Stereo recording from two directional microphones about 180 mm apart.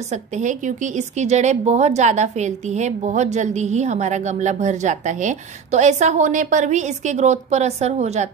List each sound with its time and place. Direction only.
0.1 s a woman's voice: 40° right (ahead or behind)